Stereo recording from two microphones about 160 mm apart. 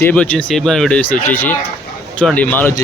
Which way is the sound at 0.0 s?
10° left (ahead or behind).